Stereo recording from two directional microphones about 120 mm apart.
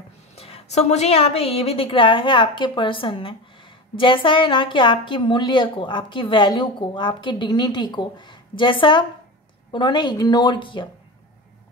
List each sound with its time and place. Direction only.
0.4 s a woman's voice: 55° left (ahead or behind)